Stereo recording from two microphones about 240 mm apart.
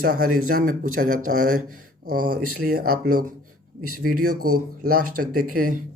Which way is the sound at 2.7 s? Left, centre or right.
Right.